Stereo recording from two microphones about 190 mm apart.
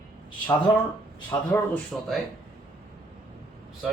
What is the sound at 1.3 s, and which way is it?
Speech, 10° left (ahead or behind).